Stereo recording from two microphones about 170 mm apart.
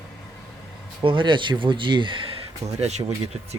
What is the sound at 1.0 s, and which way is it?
Speech, 30° right (ahead or behind).